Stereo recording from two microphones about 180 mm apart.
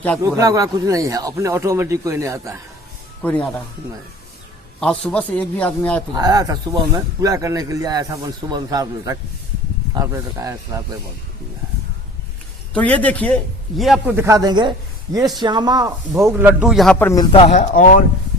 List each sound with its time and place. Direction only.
0.2 s speech: 20° right (ahead or behind)
3.2 s speech: 5° left (ahead or behind)
4.8 s speech: 5° left (ahead or behind)
6.1 s speech: 20° right (ahead or behind)
12.7 s a man's voice: 10° left (ahead or behind)
17.2 s speech: 30° left (ahead or behind)
17.5 s speech: 45° left (ahead or behind)